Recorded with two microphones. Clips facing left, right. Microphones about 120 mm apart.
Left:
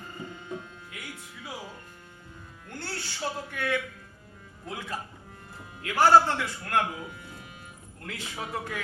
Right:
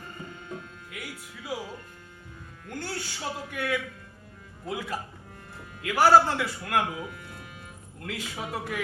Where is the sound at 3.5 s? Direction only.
10° right (ahead or behind).